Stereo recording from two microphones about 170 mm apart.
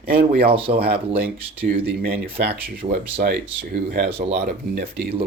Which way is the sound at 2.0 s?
65° right (ahead or behind).